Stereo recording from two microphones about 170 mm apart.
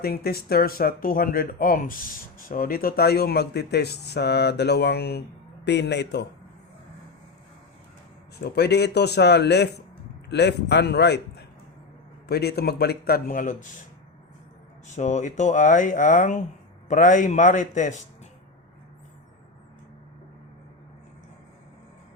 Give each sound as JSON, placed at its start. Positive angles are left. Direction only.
{"t": 0.0, "sound": "speech", "side_deg": 65}
{"t": 5.6, "sound": "a man's voice", "side_deg": 90}
{"t": 8.4, "sound": "a man's voice", "side_deg": 70}
{"t": 14.9, "sound": "speech", "side_deg": 45}